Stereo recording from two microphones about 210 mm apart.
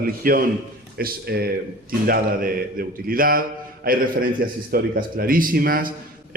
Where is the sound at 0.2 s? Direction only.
45° right (ahead or behind).